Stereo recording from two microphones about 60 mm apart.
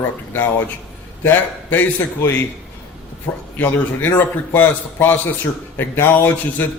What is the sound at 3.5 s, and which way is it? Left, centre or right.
A man's voice, left.